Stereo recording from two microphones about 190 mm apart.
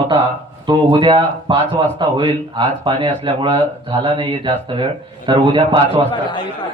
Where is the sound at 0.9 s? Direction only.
25° right (ahead or behind).